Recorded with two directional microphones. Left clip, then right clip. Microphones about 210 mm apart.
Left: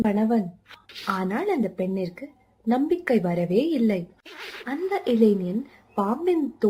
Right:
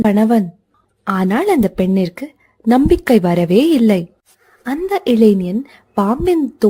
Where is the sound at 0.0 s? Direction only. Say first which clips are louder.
Right 9 dB; 50° right (ahead or behind).